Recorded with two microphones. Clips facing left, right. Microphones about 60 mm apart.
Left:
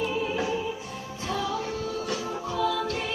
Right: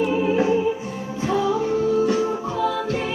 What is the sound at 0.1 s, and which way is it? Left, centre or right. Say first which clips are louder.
Music: right 9 dB; right.